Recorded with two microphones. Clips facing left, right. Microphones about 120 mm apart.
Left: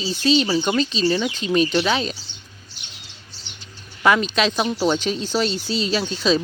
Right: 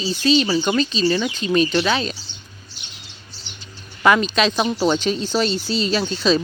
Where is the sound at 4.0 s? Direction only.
5° left (ahead or behind).